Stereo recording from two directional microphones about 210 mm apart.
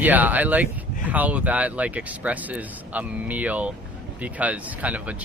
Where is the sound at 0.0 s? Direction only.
10° right (ahead or behind).